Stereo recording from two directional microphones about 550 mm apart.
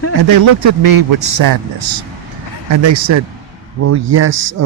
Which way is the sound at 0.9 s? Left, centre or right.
Right.